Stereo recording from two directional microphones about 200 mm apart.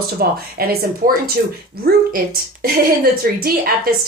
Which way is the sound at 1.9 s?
50° right (ahead or behind).